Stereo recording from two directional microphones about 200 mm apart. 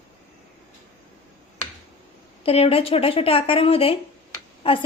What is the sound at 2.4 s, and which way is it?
A woman's voice, 30° left (ahead or behind).